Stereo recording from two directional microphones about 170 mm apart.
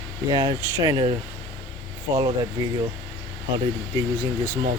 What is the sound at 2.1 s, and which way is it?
Speech, 20° right (ahead or behind).